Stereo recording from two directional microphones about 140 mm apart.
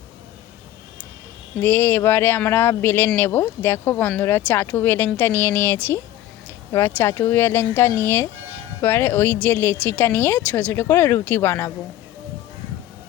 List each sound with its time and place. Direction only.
1.6 s speech: 15° left (ahead or behind)